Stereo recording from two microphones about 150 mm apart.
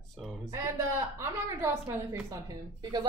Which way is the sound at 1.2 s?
20° right (ahead or behind).